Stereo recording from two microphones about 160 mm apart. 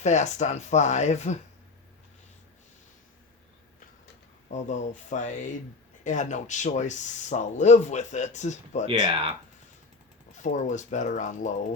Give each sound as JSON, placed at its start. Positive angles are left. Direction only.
{"t": 0.0, "sound": "speech", "side_deg": 45}
{"t": 4.5, "sound": "speech", "side_deg": 50}
{"t": 8.9, "sound": "speech", "side_deg": -35}
{"t": 10.3, "sound": "speech", "side_deg": 50}